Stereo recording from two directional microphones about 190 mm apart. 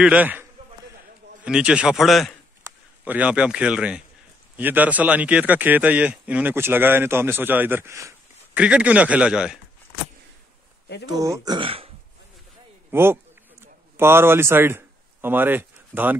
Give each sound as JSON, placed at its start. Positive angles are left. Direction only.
{"t": 0.0, "sound": "speech", "side_deg": -5}
{"t": 11.1, "sound": "speech", "side_deg": -15}
{"t": 12.9, "sound": "speech", "side_deg": -10}